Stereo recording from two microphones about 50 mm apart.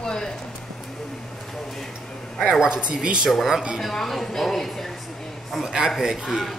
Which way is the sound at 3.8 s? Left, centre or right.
Centre.